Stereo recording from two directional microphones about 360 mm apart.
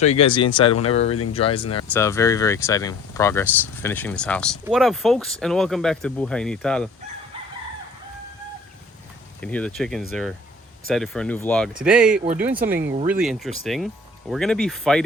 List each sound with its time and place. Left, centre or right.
0.0 s speech: centre
9.4 s speech: centre